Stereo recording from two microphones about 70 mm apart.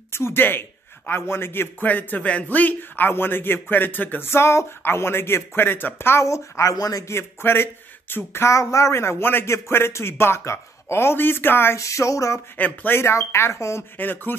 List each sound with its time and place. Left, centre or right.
0.1 s a man's voice: left
4.3 s a man's voice: left
6.7 s a sound: left
7.2 s a man's voice: left
11.8 s a sound: left
12.5 s a man's voice: left
13.9 s speech: left